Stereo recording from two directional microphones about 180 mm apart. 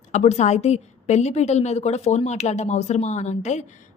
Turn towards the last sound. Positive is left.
turn(degrees=40)  # may be behind; listen again after turning